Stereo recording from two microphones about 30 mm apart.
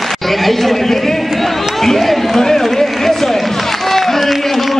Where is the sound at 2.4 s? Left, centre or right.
Centre.